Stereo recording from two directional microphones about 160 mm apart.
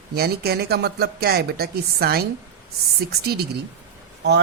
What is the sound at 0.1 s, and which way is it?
Speech, 80° right.